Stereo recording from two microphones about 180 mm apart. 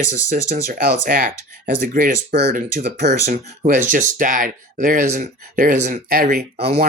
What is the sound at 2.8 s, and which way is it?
Speech, 65° right (ahead or behind).